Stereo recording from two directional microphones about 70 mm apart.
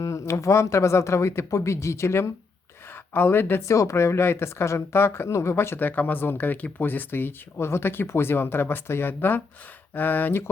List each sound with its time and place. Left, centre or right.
0.0 s speech: left
3.1 s speech: left
3.8 s speech: left